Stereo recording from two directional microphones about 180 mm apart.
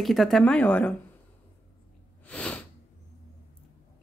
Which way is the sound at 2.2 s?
5° left (ahead or behind).